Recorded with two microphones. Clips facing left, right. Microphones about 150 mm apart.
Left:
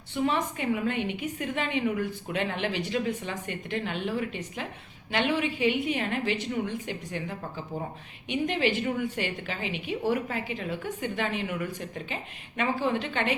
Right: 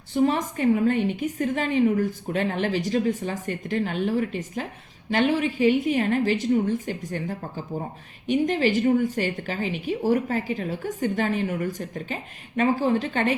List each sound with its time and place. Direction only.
0.1 s a woman's voice: 40° right (ahead or behind)